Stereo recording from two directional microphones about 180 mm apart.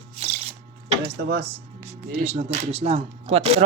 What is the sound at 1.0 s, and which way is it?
Speech, 65° right (ahead or behind).